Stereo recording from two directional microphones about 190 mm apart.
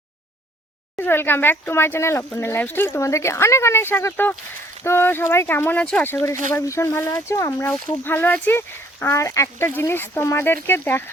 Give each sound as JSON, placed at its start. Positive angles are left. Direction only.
{"t": 0.9, "sound": "speech", "side_deg": 10}